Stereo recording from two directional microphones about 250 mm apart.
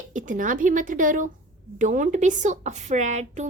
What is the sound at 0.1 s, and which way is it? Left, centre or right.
A woman's voice, right.